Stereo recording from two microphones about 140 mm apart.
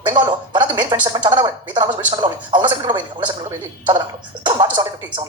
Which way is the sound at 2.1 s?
35° right (ahead or behind).